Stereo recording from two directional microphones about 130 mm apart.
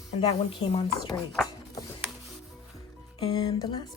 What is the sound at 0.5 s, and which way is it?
Music, 40° left (ahead or behind).